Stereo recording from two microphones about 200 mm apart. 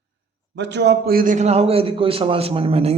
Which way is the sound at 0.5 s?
60° right (ahead or behind).